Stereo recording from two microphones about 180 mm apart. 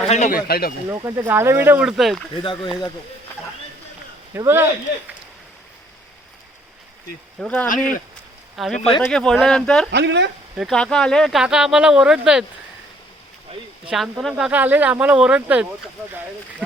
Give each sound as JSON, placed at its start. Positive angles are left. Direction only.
{"t": 0.1, "sound": "a man's voice", "side_deg": 45}
{"t": 0.9, "sound": "speech", "side_deg": -15}
{"t": 2.4, "sound": "speech", "side_deg": 25}
{"t": 4.4, "sound": "speech", "side_deg": -15}
{"t": 7.3, "sound": "speech", "side_deg": 5}
{"t": 9.9, "sound": "speech", "side_deg": -75}
{"t": 10.6, "sound": "speech", "side_deg": 5}
{"t": 13.8, "sound": "speech", "side_deg": 0}